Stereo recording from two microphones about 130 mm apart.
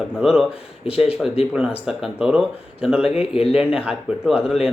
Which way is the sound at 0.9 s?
50° left (ahead or behind).